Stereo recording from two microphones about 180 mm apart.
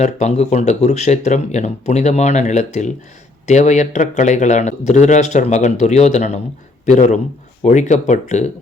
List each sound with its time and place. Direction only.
0.0 s speech: 40° left (ahead or behind)